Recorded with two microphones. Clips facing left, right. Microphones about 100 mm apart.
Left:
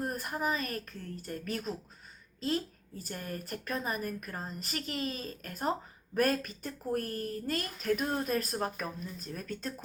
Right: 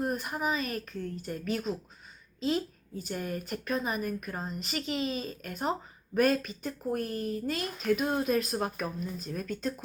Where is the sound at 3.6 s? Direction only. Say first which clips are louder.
Right 3 dB; 15° right (ahead or behind).